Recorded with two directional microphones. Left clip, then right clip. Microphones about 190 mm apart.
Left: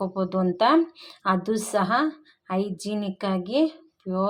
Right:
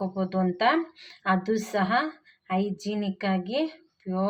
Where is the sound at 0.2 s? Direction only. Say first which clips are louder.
Left 3 dB; 30° left (ahead or behind).